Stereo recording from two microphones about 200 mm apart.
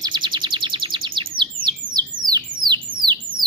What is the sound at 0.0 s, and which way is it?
Chirp, 20° right (ahead or behind).